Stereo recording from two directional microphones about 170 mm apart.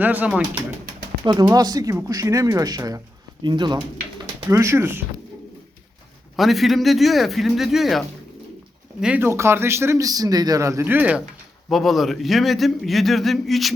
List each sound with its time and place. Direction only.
0.0 s speech: 10° right (ahead or behind)
1.2 s speech: 25° right (ahead or behind)
4.4 s speech: 15° right (ahead or behind)
6.3 s a man's voice: centre (ahead or behind)